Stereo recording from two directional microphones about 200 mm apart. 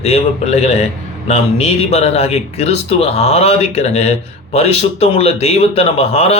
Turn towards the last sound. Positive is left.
turn(degrees=30)  # may be behind; listen again after turning